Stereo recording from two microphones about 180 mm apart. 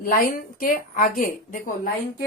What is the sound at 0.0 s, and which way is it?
A woman's voice, 50° left (ahead or behind).